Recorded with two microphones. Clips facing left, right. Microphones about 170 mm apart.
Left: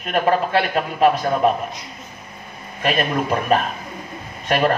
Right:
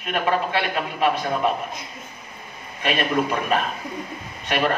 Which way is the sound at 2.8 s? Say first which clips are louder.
Left 2 dB; 40° left (ahead or behind).